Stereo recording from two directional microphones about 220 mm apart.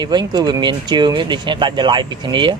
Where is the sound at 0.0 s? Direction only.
20° right (ahead or behind).